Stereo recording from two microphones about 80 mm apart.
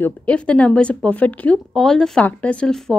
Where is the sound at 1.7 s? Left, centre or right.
Centre.